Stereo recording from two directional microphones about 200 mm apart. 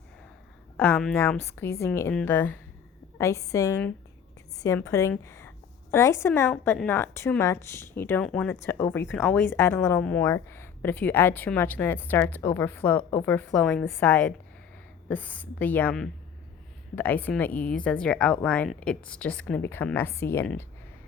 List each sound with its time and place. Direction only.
0.8 s a woman's voice: 5° left (ahead or behind)